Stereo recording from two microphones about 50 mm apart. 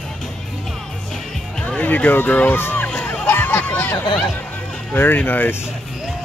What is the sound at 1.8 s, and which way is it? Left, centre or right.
Speech, left.